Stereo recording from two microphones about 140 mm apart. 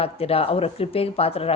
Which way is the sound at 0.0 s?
45° left (ahead or behind).